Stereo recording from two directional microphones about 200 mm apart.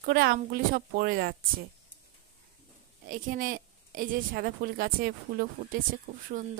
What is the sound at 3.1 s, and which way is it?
Speech, 45° right (ahead or behind).